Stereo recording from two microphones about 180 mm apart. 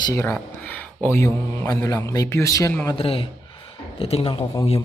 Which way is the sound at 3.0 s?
30° left (ahead or behind).